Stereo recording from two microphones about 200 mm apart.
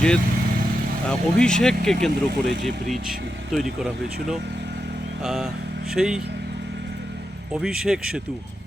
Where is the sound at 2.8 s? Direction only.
40° right (ahead or behind).